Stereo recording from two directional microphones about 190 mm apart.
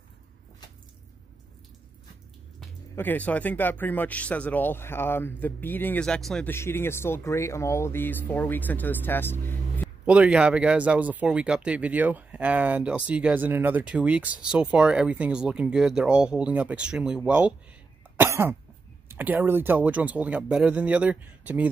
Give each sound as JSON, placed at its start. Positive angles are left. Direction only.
{"t": 3.0, "sound": "speech", "side_deg": 10}
{"t": 10.0, "sound": "speech", "side_deg": -5}
{"t": 18.1, "sound": "cough", "side_deg": -10}
{"t": 19.0, "sound": "speech", "side_deg": -10}